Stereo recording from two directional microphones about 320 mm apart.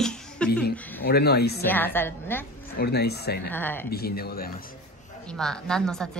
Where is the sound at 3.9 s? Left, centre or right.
Left.